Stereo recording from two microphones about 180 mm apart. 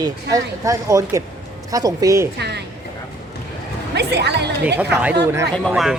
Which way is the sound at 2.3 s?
65° right (ahead or behind).